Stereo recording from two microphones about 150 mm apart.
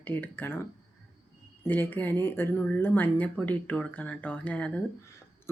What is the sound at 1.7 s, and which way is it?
Speech, 10° left (ahead or behind).